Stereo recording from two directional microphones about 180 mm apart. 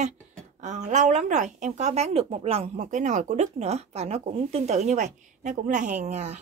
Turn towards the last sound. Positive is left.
turn(degrees=-40)  # may be behind; listen again after turning